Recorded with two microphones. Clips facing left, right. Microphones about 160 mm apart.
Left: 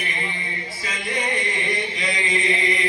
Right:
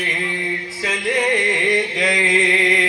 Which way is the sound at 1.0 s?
85° right.